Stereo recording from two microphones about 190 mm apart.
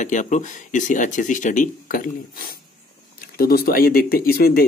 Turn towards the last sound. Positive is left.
turn(degrees=50)  # may be behind; listen again after turning